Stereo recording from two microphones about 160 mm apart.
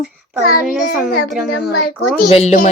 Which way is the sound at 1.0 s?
Centre (ahead or behind).